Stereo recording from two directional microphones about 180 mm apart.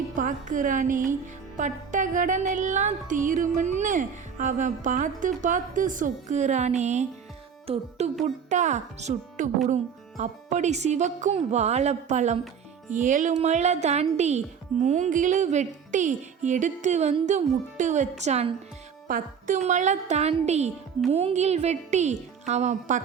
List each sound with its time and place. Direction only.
0.1 s speech: 45° right (ahead or behind)
19.0 s speech: 50° right (ahead or behind)